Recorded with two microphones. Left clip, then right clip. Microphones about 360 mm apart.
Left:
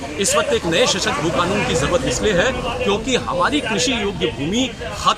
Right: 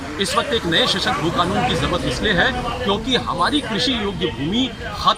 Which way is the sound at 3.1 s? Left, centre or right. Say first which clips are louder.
Right 1 dB; centre.